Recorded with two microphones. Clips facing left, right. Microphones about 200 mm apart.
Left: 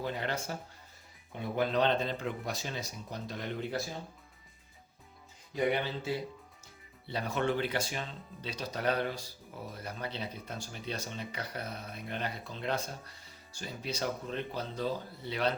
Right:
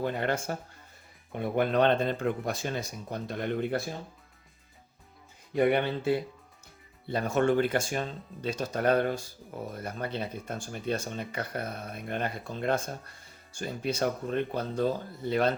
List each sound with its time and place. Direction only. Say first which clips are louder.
0.0 s speech: right 6 dB; 55° right (ahead or behind)
5.5 s speech: right 6 dB; 60° right (ahead or behind)